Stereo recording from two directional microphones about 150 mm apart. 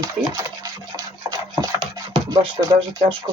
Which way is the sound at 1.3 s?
30° right (ahead or behind).